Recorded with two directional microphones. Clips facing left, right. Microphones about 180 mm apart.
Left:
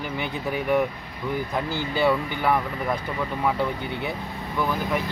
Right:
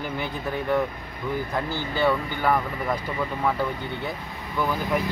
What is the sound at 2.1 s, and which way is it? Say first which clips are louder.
Speech: even; centre (ahead or behind).